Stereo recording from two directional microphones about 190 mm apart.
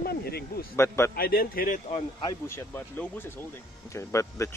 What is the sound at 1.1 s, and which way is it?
Speech, 50° left (ahead or behind).